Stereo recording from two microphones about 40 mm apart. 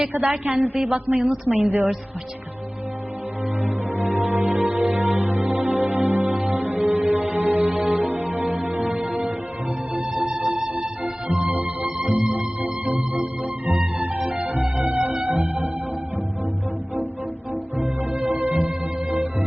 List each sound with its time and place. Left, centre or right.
0.1 s a woman's voice: right
3.6 s music: right
10.2 s music: right
11.4 s music: right
11.9 s music: right
12.6 s organ: right
14.4 s music: right
17.5 s music: right